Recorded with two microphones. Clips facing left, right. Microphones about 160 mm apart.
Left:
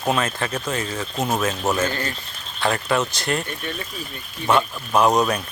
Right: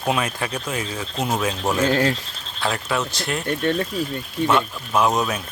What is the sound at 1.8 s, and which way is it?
Speech, 80° right.